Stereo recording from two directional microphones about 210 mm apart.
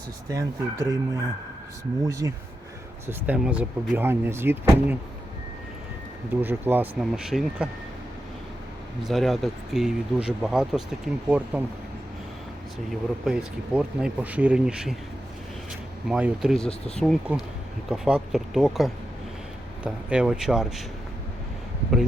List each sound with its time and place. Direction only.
0.3 s speech: 15° right (ahead or behind)
6.4 s speech: 10° right (ahead or behind)
9.0 s speech: centre (ahead or behind)
12.9 s speech: 5° right (ahead or behind)
16.0 s speech: 5° right (ahead or behind)